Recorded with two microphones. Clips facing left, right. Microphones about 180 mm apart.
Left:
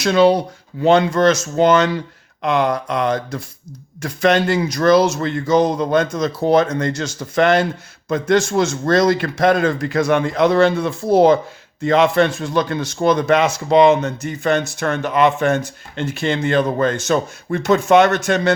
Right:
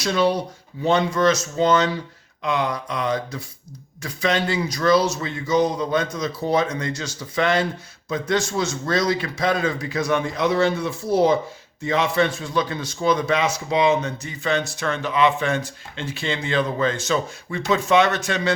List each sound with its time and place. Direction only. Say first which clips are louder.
0.0 s a man's voice: left 7 dB; 70° left (ahead or behind)
10.8 s a man's voice: left 6 dB; 55° left (ahead or behind)
12.2 s a man's voice: left 4 dB; 90° left
12.6 s speech: left 5 dB; 70° left (ahead or behind)
13.1 s speech: left 6 dB; 50° left (ahead or behind)
13.7 s speech: left 7 dB; 80° left
14.3 s speech: left 6 dB; 50° left (ahead or behind)